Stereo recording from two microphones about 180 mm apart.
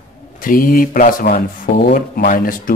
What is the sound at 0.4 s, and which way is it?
A man's voice, 50° left (ahead or behind).